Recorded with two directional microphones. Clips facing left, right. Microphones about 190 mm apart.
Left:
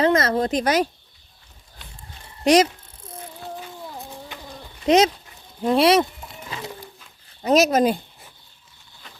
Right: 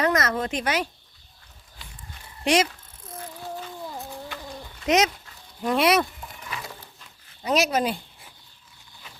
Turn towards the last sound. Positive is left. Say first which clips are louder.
# left 6 dB
turn(degrees=40)  # may be behind; listen again after turning